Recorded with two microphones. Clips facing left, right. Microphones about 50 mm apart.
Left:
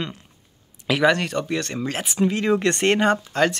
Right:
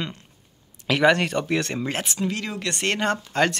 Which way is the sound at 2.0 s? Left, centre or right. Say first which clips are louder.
Left 7 dB; centre.